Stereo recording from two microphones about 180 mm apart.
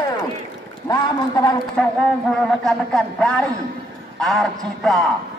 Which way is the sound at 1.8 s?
5° left (ahead or behind).